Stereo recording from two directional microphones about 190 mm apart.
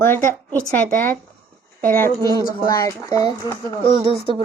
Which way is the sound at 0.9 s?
45° right (ahead or behind).